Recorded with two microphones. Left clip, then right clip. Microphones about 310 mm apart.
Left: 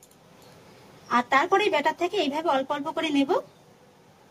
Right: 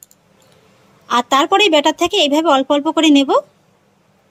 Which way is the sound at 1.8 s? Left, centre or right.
Centre.